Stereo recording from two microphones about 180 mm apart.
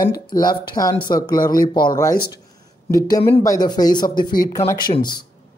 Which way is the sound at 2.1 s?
60° left (ahead or behind).